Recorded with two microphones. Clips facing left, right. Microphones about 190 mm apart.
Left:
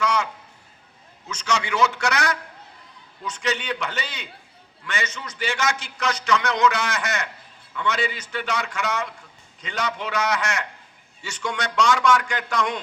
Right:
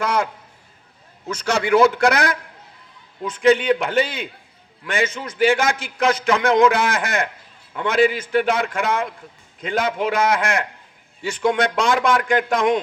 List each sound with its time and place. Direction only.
0.0 s a man's voice: 55° right (ahead or behind)
1.3 s a man's voice: 55° right (ahead or behind)